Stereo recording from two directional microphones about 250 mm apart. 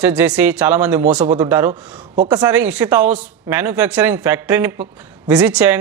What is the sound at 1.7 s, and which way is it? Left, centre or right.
Speech, right.